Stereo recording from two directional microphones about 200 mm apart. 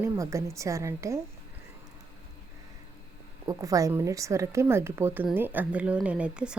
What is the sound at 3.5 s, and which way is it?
Speech, 15° right (ahead or behind).